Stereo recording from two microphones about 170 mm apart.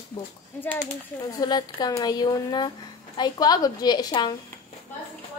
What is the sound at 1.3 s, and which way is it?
Speech, 25° left (ahead or behind).